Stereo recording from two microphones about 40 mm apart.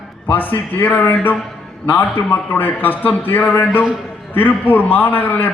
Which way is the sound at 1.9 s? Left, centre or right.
Left.